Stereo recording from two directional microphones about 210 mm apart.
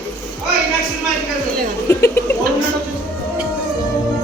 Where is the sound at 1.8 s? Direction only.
10° left (ahead or behind).